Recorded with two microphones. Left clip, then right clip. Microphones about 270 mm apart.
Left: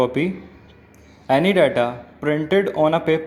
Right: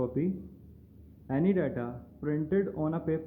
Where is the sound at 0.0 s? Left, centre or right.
Centre.